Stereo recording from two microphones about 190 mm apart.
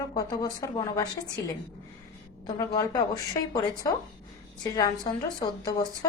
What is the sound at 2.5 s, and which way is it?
A woman's voice, 20° left (ahead or behind).